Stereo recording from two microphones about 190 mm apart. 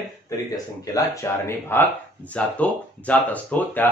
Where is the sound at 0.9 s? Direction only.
15° left (ahead or behind).